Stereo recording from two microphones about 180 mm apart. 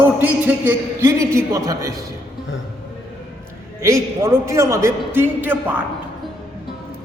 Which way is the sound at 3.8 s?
15° right (ahead or behind).